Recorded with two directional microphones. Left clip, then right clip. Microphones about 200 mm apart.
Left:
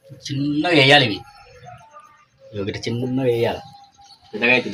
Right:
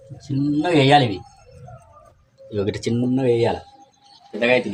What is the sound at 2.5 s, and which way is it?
Speech, 55° right (ahead or behind).